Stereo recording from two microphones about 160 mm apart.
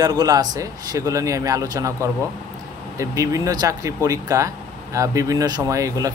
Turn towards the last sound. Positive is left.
turn(degrees=-20)  # may be behind; listen again after turning